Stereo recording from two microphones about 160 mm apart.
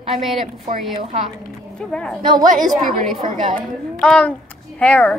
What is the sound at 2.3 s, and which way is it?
Speech, 55° right (ahead or behind).